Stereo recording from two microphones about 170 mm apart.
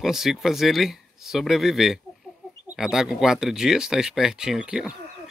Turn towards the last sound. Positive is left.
turn(degrees=-5)  # may be behind; listen again after turning